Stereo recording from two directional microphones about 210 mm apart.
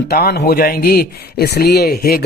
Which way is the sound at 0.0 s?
50° left (ahead or behind).